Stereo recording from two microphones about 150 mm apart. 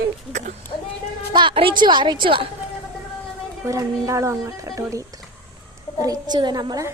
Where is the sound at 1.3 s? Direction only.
35° right (ahead or behind).